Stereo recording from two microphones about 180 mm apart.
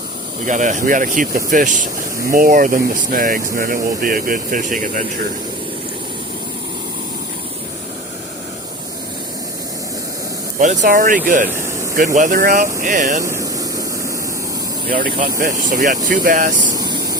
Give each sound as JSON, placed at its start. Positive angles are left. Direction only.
{"t": 0.4, "sound": "speech", "side_deg": -45}
{"t": 10.6, "sound": "speech", "side_deg": -40}
{"t": 13.2, "sound": "vehicle", "side_deg": -15}
{"t": 14.8, "sound": "speech", "side_deg": -50}
{"t": 16.7, "sound": "vehicle", "side_deg": -20}